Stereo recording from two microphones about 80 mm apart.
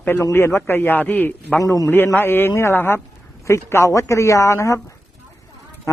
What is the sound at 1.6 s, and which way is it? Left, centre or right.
Speech, left.